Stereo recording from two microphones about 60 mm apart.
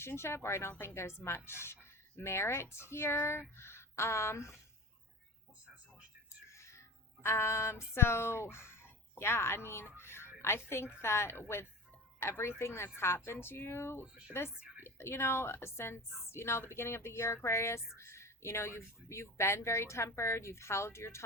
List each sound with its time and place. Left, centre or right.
0.0 s speech: left
3.6 s a sound: left
6.5 s music: left
7.9 s speech: left
10.0 s a sound: left
10.4 s speech: left